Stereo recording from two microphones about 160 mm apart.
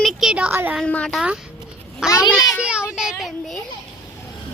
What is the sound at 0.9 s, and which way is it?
Speech, 5° left (ahead or behind).